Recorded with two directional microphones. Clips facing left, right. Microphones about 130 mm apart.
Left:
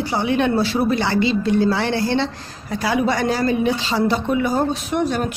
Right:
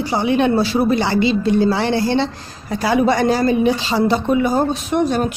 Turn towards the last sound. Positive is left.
turn(degrees=-25)  # may be behind; listen again after turning